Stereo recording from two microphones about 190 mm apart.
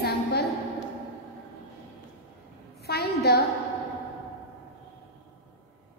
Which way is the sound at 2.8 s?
55° left (ahead or behind).